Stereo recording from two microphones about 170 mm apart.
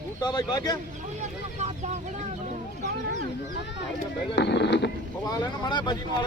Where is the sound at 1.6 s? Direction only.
40° right (ahead or behind).